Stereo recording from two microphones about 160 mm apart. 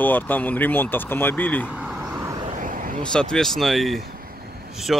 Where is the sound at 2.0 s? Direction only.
20° right (ahead or behind).